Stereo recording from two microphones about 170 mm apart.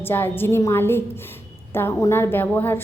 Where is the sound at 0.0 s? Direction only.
15° left (ahead or behind).